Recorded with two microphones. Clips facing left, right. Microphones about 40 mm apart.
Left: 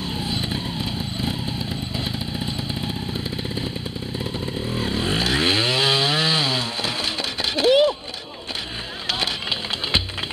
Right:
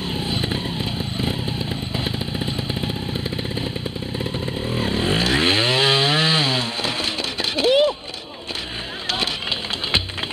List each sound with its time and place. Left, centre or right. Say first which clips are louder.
0.1 s vehicle: right 3 dB; centre
4.2 s chainsaw: right 2 dB; centre
7.5 s a sound: even; centre